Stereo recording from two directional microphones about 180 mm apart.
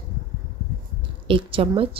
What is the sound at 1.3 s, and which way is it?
Speech, 30° right (ahead or behind).